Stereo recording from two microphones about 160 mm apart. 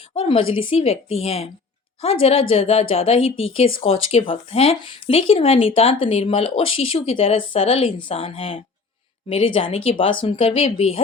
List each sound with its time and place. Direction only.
0.1 s speech: 30° left (ahead or behind)